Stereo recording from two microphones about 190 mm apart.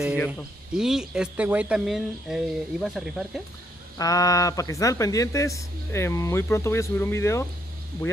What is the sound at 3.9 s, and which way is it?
Speech, 20° left (ahead or behind).